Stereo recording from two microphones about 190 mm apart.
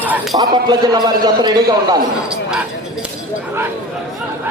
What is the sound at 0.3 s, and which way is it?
A man's voice, 20° right (ahead or behind).